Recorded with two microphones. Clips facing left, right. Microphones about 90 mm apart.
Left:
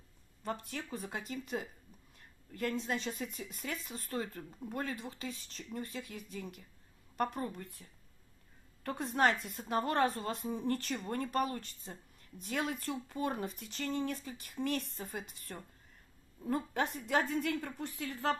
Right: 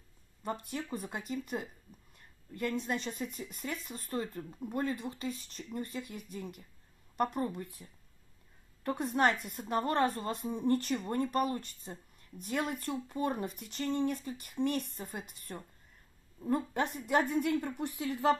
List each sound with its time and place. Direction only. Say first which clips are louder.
0.4 s a woman's voice: right 2 dB; 5° right (ahead or behind)
7.8 s speech: right 4 dB; 15° right (ahead or behind)
8.8 s a woman's voice: right 2 dB; centre (ahead or behind)